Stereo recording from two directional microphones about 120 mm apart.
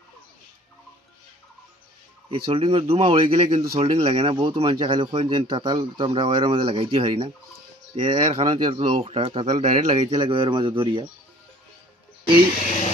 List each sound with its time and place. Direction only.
2.3 s speech: 45° right (ahead or behind)
10.2 s speech: 40° right (ahead or behind)